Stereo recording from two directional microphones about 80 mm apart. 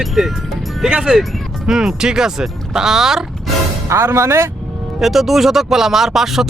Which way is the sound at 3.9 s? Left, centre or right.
Right.